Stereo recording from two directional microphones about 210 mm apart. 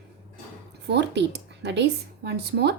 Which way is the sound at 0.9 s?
55° right (ahead or behind).